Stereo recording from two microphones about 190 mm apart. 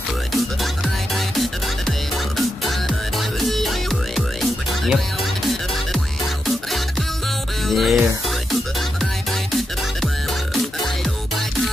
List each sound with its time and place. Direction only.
1.4 s music: centre (ahead or behind)
7.6 s music: centre (ahead or behind)